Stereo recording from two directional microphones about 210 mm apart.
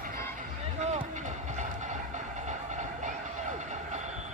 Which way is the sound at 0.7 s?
30° right (ahead or behind).